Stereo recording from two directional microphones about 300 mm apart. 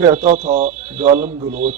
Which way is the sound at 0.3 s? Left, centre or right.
Right.